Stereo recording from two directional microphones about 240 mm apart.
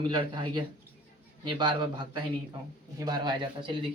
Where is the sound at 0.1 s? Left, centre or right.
Centre.